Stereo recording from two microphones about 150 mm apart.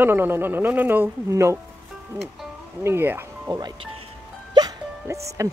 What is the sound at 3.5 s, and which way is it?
Speech, 30° right (ahead or behind).